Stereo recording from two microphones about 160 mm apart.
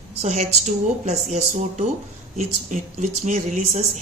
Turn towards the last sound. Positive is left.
turn(degrees=-50)  # may be behind; listen again after turning